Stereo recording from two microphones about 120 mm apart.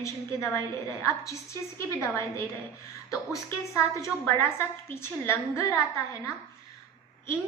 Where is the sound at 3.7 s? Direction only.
25° left (ahead or behind).